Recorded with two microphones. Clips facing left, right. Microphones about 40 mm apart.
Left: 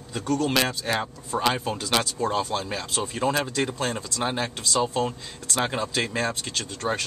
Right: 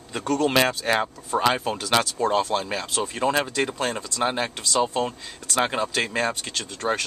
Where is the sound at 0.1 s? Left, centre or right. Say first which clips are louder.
Right 2 dB; right.